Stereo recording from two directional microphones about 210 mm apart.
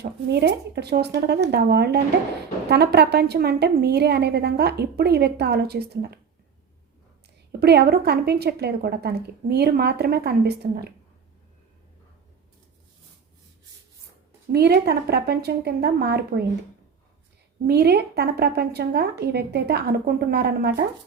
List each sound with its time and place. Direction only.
0.0 s a woman's voice: 55° right (ahead or behind)
7.6 s a woman's voice: 50° right (ahead or behind)
14.5 s a woman's voice: 50° right (ahead or behind)
17.7 s a woman's voice: 50° right (ahead or behind)